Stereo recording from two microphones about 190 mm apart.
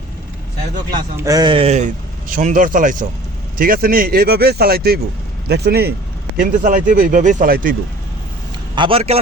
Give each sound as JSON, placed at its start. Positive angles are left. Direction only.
{"t": 1.2, "sound": "speech", "side_deg": -20}
{"t": 2.3, "sound": "speech", "side_deg": -45}
{"t": 6.4, "sound": "speech", "side_deg": -45}
{"t": 8.7, "sound": "a man's voice", "side_deg": -25}